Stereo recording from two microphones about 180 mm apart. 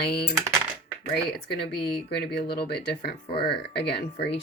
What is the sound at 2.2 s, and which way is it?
Speech, 65° left (ahead or behind).